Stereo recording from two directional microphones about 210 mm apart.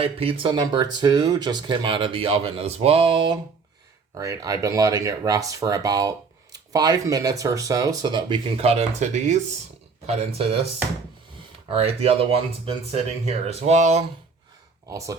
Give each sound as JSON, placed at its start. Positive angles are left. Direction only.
{"t": 0.0, "sound": "speech", "side_deg": -25}
{"t": 11.7, "sound": "speech", "side_deg": -30}
{"t": 14.8, "sound": "speech", "side_deg": -15}